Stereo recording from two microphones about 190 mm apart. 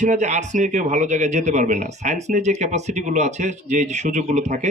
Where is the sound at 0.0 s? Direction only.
40° right (ahead or behind).